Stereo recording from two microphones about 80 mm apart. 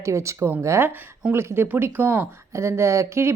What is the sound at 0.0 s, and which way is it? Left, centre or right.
A woman's voice, right.